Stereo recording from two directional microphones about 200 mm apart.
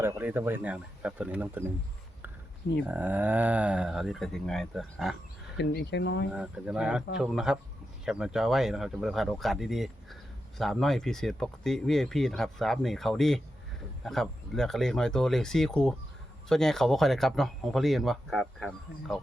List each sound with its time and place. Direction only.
0.0 s speech: 10° right (ahead or behind)
2.8 s speech: 10° right (ahead or behind)
5.5 s speech: 55° left (ahead or behind)
6.3 s speech: 5° right (ahead or behind)